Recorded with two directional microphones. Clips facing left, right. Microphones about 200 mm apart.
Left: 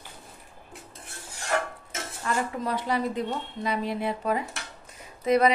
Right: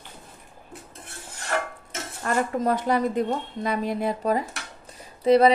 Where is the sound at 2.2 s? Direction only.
45° right (ahead or behind).